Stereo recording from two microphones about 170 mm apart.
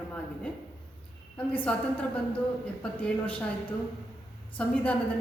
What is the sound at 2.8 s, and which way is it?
A woman's voice, 5° left (ahead or behind).